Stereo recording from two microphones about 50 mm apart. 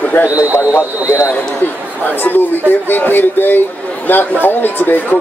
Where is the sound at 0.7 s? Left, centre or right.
Left.